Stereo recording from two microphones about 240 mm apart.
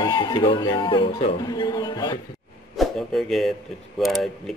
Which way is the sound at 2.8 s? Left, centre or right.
Centre.